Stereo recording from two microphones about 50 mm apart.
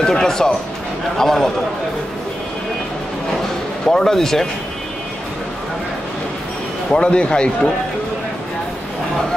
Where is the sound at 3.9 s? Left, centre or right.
Centre.